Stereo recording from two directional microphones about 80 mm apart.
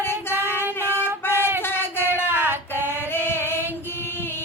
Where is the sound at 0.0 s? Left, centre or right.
Left.